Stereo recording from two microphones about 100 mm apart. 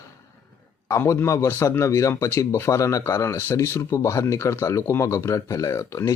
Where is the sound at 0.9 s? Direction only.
30° left (ahead or behind).